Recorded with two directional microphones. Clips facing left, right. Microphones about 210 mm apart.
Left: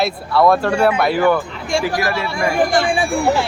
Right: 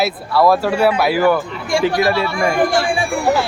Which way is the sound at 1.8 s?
25° right (ahead or behind).